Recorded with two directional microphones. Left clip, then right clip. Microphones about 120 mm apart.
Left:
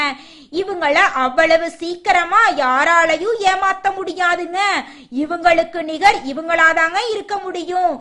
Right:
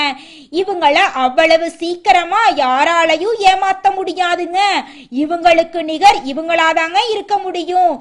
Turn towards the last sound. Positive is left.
turn(degrees=-20)  # may be behind; listen again after turning